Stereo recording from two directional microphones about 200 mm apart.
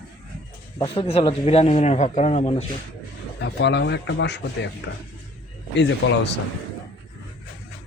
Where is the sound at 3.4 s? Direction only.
60° left (ahead or behind).